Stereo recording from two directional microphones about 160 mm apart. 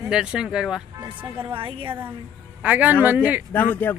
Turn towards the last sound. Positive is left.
turn(degrees=10)  # may be behind; listen again after turning